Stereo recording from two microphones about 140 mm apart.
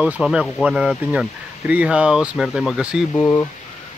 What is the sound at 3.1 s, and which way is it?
Speech, 20° left (ahead or behind).